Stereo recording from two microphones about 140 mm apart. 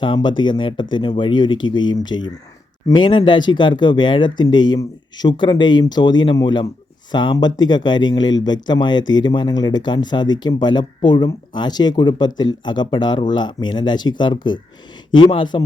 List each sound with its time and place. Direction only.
0.0 s speech: 35° left (ahead or behind)